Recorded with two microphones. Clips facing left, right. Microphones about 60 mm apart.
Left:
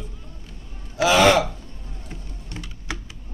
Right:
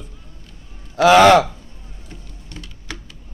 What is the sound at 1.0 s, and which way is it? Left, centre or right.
Speech, right.